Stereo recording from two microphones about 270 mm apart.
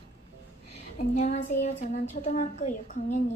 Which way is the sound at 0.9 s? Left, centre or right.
Left.